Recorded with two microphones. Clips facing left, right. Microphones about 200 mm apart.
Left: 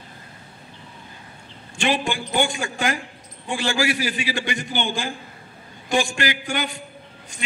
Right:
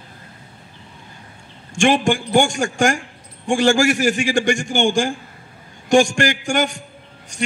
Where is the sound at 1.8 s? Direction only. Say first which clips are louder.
Right 7 dB; 45° right (ahead or behind).